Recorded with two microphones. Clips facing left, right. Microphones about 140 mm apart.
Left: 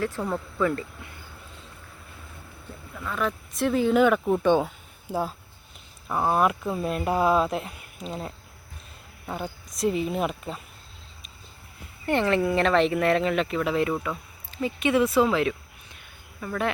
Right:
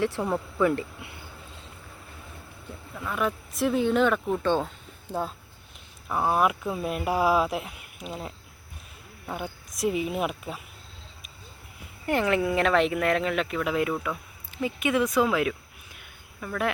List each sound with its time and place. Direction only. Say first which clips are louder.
0.2 s speech: right 1 dB; 15° right (ahead or behind)
2.9 s speech: even; 10° right (ahead or behind)
12.0 s speech: left 1 dB; 5° right (ahead or behind)